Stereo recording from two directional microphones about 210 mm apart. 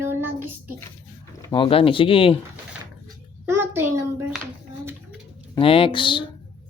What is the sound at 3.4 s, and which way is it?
Speech, 10° right (ahead or behind).